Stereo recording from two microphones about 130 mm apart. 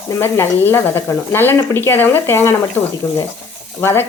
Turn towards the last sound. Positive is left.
turn(degrees=20)  # may be behind; listen again after turning